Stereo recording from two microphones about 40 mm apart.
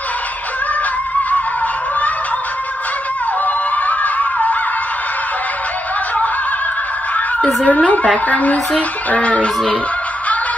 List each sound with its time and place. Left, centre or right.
3.4 s music: left
7.3 s speech: left